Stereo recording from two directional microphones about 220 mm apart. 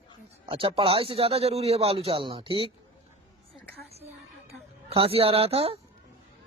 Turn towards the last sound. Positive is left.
turn(degrees=-25)  # may be behind; listen again after turning